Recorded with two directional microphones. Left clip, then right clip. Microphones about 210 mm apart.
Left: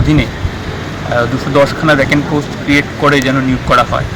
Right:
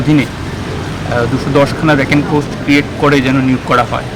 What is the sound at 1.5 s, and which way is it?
Speech, 5° left (ahead or behind).